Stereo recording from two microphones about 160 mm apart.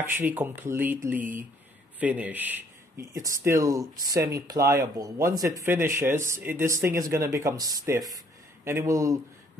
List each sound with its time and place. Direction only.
0.0 s speech: 15° right (ahead or behind)